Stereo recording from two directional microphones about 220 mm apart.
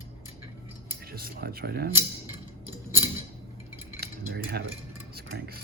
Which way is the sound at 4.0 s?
45° right (ahead or behind).